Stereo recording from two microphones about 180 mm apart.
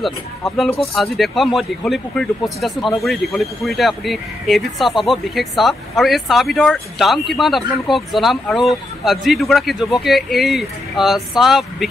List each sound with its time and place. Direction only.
0.6 s speech: centre (ahead or behind)